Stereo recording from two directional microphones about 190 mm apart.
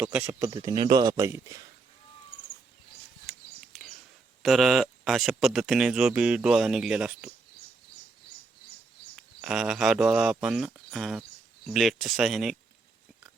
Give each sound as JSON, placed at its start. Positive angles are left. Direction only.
{"t": 0.0, "sound": "speech", "side_deg": -10}
{"t": 3.6, "sound": "a sound", "side_deg": 0}
{"t": 4.4, "sound": "speech", "side_deg": 0}
{"t": 9.1, "sound": "speech", "side_deg": -5}